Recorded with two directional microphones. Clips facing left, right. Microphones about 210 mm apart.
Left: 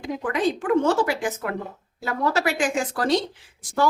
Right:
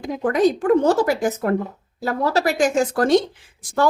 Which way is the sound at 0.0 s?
40° right (ahead or behind).